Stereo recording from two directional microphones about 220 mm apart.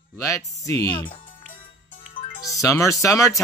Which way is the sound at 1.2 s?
40° left (ahead or behind).